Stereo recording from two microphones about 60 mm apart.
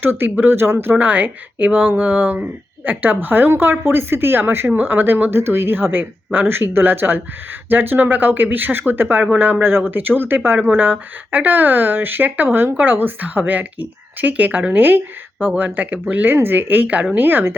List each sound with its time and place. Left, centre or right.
0.0 s speech: right
0.9 s speech: right